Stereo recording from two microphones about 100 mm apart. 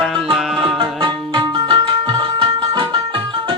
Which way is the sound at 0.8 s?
55° right (ahead or behind).